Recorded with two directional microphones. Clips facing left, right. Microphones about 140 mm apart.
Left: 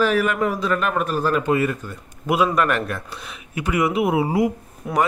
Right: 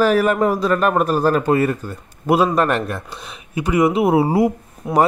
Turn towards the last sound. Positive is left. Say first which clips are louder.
# right 5 dB
turn(degrees=-30)  # may be behind; listen again after turning